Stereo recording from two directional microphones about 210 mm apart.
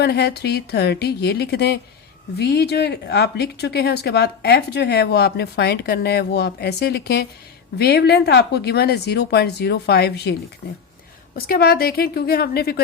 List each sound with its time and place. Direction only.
0.0 s speech: 50° left (ahead or behind)